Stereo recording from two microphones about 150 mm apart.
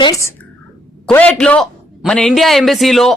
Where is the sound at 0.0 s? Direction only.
20° left (ahead or behind).